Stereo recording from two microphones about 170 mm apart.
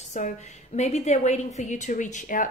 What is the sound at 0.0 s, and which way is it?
A woman's voice, 45° left (ahead or behind).